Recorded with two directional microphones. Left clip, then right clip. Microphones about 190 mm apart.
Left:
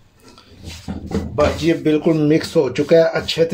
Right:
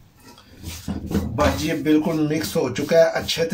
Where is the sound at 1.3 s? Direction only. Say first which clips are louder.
Left 5 dB; 35° left (ahead or behind).